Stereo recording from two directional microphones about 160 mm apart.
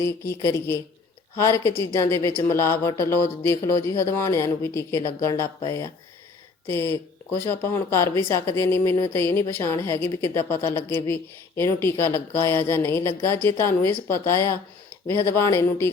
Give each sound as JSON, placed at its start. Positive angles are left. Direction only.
{"t": 0.0, "sound": "speech", "side_deg": 15}